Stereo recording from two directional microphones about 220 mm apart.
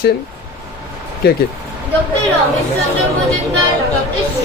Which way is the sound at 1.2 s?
45° left (ahead or behind).